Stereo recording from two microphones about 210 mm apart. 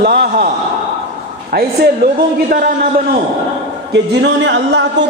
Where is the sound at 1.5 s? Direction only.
45° right (ahead or behind).